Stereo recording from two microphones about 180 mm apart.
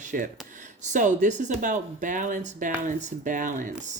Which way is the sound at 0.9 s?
45° right (ahead or behind).